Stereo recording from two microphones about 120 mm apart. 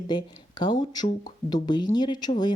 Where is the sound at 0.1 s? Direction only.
40° left (ahead or behind).